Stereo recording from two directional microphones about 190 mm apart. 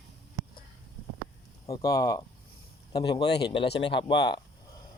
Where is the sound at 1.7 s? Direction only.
20° left (ahead or behind).